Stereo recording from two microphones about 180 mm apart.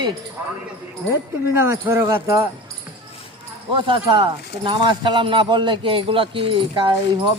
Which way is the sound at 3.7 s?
30° right (ahead or behind).